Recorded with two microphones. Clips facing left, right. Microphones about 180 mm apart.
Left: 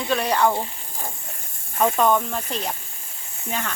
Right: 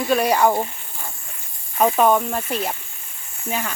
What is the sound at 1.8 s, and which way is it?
Speech, 10° right (ahead or behind).